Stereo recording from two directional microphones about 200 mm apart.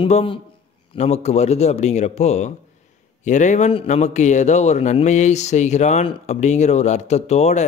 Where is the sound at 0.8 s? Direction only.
30° left (ahead or behind).